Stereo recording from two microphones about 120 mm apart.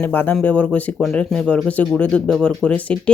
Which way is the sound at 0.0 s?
15° left (ahead or behind).